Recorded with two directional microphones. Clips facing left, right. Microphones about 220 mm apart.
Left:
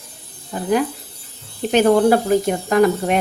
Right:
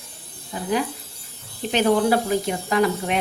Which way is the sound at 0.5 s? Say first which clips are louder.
Left 5 dB; 55° left (ahead or behind).